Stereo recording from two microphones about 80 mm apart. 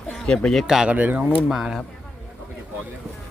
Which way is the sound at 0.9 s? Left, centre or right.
Centre.